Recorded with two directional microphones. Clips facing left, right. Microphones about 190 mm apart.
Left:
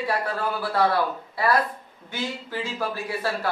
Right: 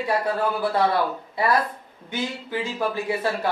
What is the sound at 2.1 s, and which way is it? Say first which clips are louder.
Speech: right 3 dB; 20° right (ahead or behind).